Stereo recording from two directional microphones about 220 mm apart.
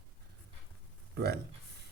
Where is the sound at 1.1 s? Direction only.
45° right (ahead or behind).